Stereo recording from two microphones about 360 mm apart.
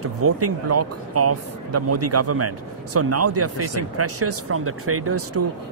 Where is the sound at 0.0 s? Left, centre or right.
Right.